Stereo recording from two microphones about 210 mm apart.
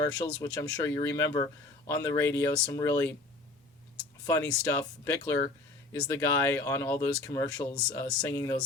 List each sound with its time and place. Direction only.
0.6 s speech: 15° left (ahead or behind)
4.3 s speech: 10° left (ahead or behind)